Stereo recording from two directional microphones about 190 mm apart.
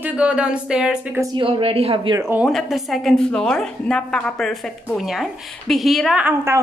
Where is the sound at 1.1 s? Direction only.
25° right (ahead or behind).